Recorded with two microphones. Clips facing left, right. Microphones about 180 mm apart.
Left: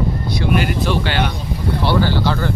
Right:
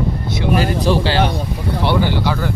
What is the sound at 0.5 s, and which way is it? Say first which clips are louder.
Speech: right 3 dB; 35° right (ahead or behind).